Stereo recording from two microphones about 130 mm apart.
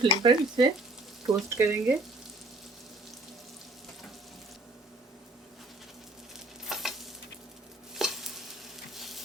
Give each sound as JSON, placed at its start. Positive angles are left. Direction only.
{"t": 0.0, "sound": "speech", "side_deg": -35}
{"t": 1.5, "sound": "speech", "side_deg": -20}
{"t": 6.7, "sound": "stir", "side_deg": 0}
{"t": 9.0, "sound": "frying", "side_deg": 0}